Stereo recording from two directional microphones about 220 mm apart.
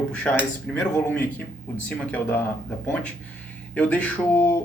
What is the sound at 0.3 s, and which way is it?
Speech, 5° left (ahead or behind).